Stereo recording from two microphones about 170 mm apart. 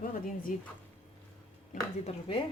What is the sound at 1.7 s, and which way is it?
Speech, 40° left (ahead or behind).